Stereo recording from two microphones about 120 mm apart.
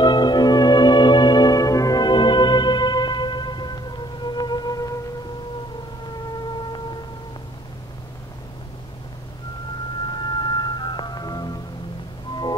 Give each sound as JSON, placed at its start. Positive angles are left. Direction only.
{"t": 0.0, "sound": "music", "side_deg": 40}
{"t": 10.1, "sound": "music", "side_deg": 35}